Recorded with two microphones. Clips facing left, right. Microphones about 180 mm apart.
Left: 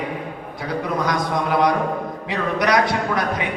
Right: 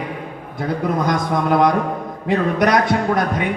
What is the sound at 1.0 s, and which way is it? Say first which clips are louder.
A man's voice: right 3 dB; 50° right (ahead or behind).